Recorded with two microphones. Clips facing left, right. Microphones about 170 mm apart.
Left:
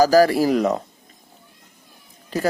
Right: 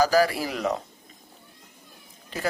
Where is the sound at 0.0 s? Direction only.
40° left (ahead or behind).